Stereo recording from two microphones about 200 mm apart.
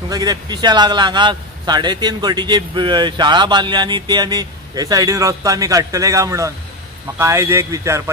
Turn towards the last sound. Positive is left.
turn(degrees=-15)  # may be behind; listen again after turning